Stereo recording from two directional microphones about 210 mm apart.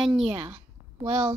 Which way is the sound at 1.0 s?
25° right (ahead or behind).